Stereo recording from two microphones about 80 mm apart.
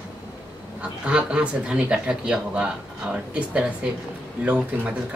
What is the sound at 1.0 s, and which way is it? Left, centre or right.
Speech, centre.